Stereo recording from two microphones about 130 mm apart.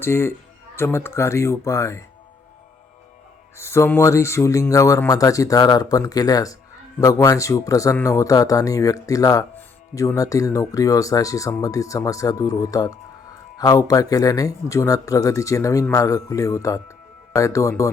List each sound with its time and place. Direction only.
0.0 s speech: 20° left (ahead or behind)
3.6 s speech: 20° left (ahead or behind)